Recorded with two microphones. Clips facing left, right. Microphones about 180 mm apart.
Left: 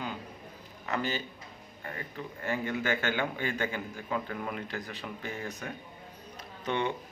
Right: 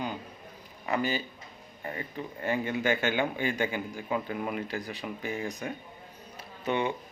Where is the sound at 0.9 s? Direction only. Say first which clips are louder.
Right 3 dB; 10° right (ahead or behind).